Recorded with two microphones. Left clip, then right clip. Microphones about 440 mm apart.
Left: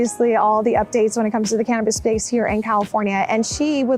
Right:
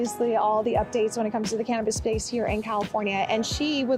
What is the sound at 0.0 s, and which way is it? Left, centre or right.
Speech, left.